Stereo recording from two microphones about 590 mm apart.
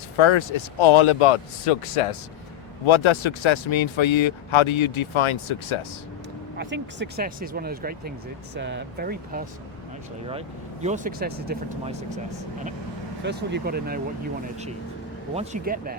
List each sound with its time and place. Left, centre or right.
0.2 s speech: left
2.8 s speech: left
6.6 s speech: centre
10.8 s speech: centre
13.2 s speech: centre
15.4 s speech: centre